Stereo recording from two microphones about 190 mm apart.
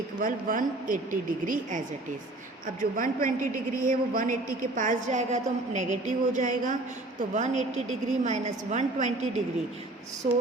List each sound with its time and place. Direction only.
0.2 s a woman's voice: 45° right (ahead or behind)